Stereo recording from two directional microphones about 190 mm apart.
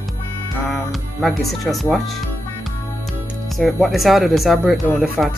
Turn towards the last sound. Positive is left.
turn(degrees=0)  # may be behind; listen again after turning